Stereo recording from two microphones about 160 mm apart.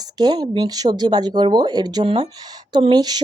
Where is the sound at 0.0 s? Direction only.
25° right (ahead or behind).